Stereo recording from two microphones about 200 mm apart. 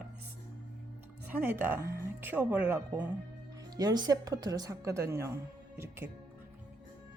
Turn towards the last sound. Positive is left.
turn(degrees=-15)  # may be behind; listen again after turning